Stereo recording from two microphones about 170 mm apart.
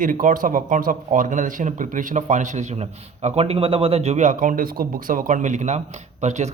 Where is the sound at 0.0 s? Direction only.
50° right (ahead or behind).